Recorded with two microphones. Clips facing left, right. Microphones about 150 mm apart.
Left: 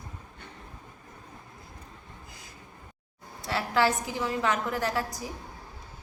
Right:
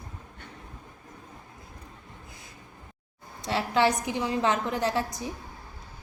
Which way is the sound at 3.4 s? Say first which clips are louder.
Right 2 dB; 20° right (ahead or behind).